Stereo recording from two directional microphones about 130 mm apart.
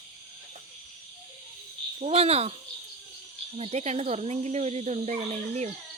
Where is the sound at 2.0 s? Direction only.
50° right (ahead or behind).